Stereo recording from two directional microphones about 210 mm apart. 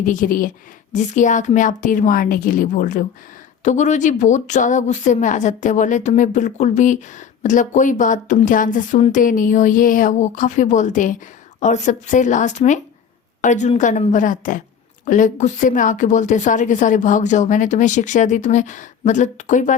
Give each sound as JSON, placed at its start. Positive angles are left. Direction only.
{"t": 0.0, "sound": "speech", "side_deg": 40}